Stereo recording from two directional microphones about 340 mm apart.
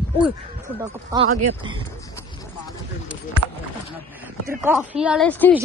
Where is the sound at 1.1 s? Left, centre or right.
Centre.